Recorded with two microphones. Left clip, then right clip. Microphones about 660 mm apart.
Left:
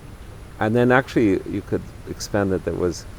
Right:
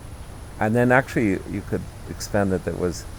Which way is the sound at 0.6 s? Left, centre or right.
Left.